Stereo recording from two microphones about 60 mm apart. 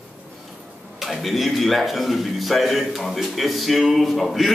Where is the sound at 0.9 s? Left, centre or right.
Centre.